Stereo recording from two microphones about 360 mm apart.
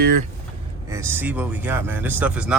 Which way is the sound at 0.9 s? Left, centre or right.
Centre.